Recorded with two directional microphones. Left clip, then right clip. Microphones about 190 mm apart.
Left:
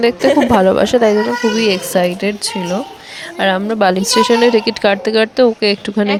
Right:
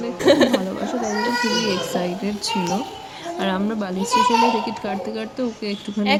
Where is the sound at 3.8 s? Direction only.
50° left (ahead or behind).